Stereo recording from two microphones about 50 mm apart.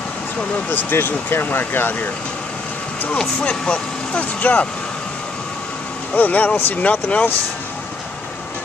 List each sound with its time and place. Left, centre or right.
0.7 s speech: left
3.2 s speech: left
6.1 s speech: left